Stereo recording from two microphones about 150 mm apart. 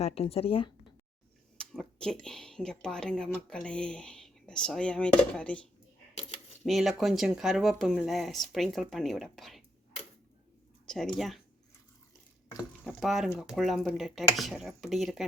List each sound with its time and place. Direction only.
0.0 s speech: 40° left (ahead or behind)
1.5 s speech: 5° left (ahead or behind)
6.7 s speech: centre (ahead or behind)
10.8 s speech: 5° left (ahead or behind)
12.8 s speech: centre (ahead or behind)